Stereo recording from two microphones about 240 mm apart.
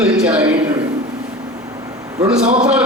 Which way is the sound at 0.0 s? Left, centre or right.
Centre.